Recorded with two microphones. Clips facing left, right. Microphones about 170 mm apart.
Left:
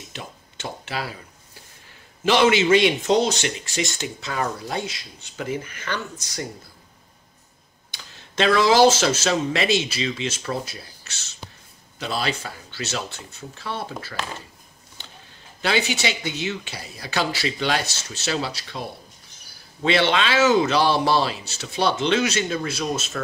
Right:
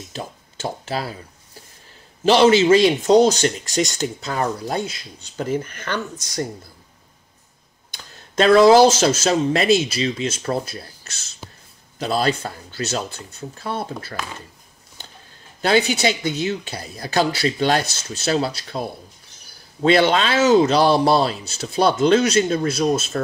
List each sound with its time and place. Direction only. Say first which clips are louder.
0.1 s speech: right 7 dB; 40° right (ahead or behind)
2.2 s speech: right 4 dB; 40° right (ahead or behind)
8.4 s speech: right 5 dB; 40° right (ahead or behind)
15.6 s speech: right 5 dB; 40° right (ahead or behind)